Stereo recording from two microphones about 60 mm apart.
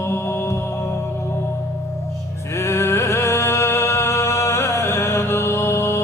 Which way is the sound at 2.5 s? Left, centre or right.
Left.